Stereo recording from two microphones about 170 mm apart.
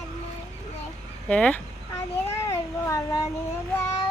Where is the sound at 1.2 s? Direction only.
5° left (ahead or behind).